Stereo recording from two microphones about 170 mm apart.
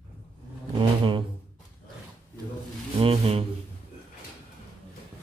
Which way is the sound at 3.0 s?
35° right (ahead or behind).